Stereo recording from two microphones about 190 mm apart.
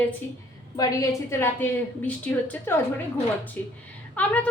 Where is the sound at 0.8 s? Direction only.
15° left (ahead or behind).